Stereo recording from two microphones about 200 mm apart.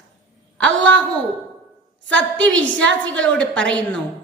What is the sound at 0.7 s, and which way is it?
Speech, 70° right (ahead or behind).